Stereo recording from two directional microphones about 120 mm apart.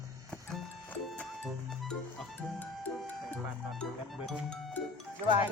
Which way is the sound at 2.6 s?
15° left (ahead or behind).